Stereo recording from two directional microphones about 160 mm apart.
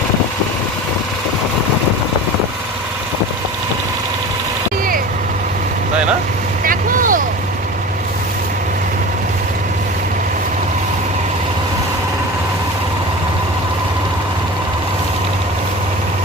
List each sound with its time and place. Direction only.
6.7 s vehicle: 60° right (ahead or behind)